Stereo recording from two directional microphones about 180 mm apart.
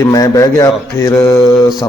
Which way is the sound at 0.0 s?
20° left (ahead or behind).